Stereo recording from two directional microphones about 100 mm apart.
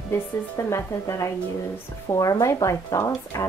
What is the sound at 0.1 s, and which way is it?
A woman's voice, 30° left (ahead or behind).